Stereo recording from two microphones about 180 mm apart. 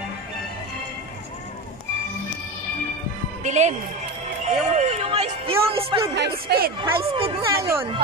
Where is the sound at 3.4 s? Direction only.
40° right (ahead or behind).